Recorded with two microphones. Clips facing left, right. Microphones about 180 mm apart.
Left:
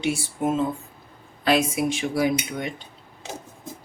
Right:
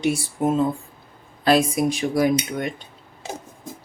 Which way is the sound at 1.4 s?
35° right (ahead or behind).